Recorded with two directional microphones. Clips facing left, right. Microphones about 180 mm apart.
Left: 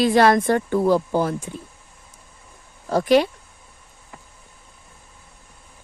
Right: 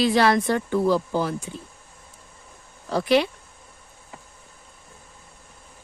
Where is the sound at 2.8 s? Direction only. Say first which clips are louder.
Left 3 dB; 45° left (ahead or behind).